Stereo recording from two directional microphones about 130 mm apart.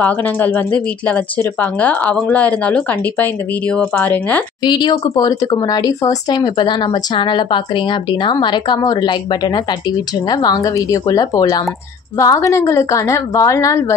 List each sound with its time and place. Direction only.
0.0 s speech: 15° left (ahead or behind)
4.6 s a woman's voice: 35° left (ahead or behind)